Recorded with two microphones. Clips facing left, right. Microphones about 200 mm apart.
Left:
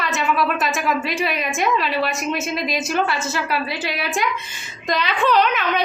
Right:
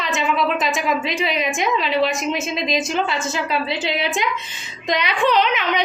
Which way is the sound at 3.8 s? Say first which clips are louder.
Right 1 dB; 20° right (ahead or behind).